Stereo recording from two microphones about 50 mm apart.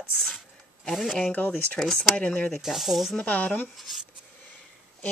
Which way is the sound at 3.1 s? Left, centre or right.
Left.